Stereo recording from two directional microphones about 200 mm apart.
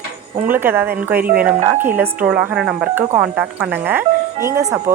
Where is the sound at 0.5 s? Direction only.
10° right (ahead or behind).